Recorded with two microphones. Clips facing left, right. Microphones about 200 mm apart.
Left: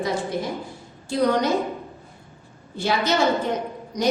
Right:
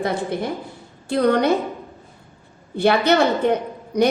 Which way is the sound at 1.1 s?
60° right (ahead or behind).